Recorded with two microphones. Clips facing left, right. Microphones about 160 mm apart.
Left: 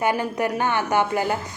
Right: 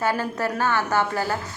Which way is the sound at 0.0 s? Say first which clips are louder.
Left 2 dB; 15° left (ahead or behind).